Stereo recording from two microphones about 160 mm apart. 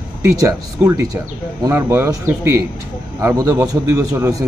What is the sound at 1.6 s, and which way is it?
A man's voice, 20° right (ahead or behind).